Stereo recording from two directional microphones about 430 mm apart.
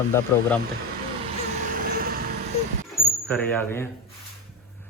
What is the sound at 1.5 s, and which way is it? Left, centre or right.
Vehicle, centre.